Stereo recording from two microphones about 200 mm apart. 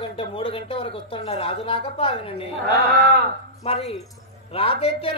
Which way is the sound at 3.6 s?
30° left (ahead or behind).